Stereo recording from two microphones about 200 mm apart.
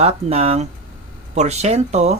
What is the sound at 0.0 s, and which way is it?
Speech, 30° right (ahead or behind).